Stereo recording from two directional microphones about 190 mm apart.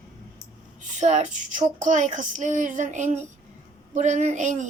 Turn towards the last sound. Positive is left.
turn(degrees=-40)  # may be behind; listen again after turning